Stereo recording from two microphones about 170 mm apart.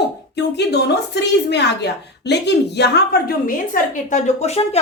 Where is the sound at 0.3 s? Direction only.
80° left.